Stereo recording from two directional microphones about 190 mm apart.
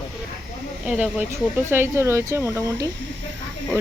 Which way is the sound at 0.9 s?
5° right (ahead or behind).